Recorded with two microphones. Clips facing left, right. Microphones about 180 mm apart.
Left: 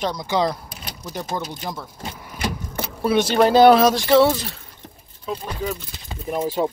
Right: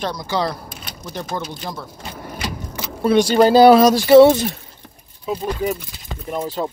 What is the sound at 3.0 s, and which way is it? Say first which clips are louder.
Speech: right 4 dB; 5° left (ahead or behind).